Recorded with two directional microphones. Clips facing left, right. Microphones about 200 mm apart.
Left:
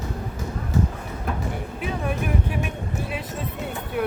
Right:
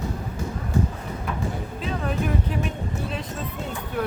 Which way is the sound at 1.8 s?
15° left (ahead or behind).